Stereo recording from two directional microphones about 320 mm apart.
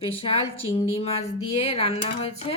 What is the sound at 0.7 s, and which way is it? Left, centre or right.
Speech, centre.